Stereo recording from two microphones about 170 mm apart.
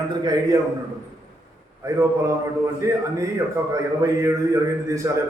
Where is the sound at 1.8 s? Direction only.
15° right (ahead or behind).